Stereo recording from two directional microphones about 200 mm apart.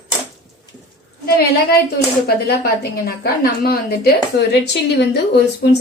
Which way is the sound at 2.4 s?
50° left (ahead or behind).